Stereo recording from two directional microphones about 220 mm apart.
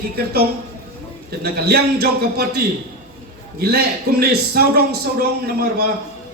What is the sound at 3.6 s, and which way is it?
A man's voice, 45° right (ahead or behind).